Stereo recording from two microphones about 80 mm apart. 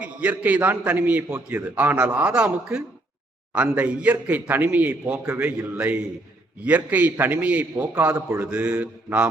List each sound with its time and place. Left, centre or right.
0.0 s a man's voice: centre